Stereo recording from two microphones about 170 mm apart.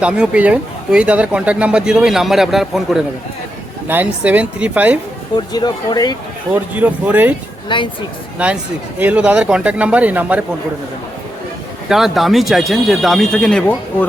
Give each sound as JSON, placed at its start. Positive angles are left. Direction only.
{"t": 0.0, "sound": "speech", "side_deg": -5}
{"t": 5.5, "sound": "speech", "side_deg": 25}
{"t": 6.5, "sound": "speech", "side_deg": -10}
{"t": 7.7, "sound": "speech", "side_deg": 30}
{"t": 8.4, "sound": "speech", "side_deg": -5}
{"t": 11.9, "sound": "speech", "side_deg": 0}